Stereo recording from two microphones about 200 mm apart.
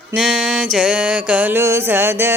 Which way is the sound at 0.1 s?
Centre (ahead or behind).